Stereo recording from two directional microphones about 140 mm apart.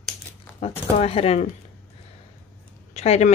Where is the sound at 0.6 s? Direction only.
45° left (ahead or behind).